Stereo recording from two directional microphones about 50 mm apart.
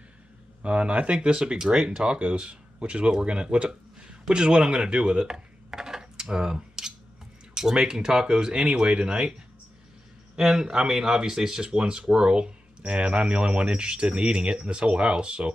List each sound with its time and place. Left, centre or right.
0.6 s speech: right
10.3 s speech: centre